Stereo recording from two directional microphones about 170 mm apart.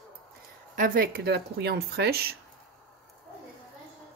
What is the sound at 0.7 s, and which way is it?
Speech, 55° right (ahead or behind).